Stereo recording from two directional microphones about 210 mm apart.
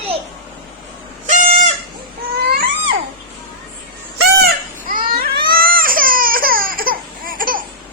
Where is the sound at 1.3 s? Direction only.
35° right (ahead or behind).